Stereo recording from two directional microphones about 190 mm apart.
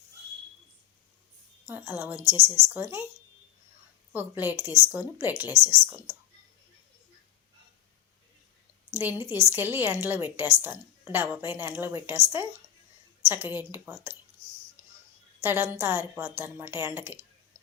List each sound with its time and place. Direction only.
1.6 s a woman's voice: 10° right (ahead or behind)
4.1 s a woman's voice: 10° right (ahead or behind)
8.9 s a woman's voice: 10° right (ahead or behind)
14.8 s a sound: 10° right (ahead or behind)
15.4 s a woman's voice: 10° right (ahead or behind)